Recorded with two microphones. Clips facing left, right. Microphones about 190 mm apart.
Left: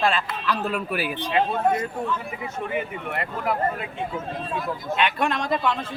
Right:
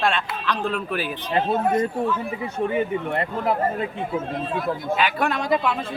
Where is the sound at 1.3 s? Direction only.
35° right (ahead or behind).